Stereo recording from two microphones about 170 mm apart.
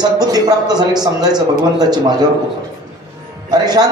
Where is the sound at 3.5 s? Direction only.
25° right (ahead or behind).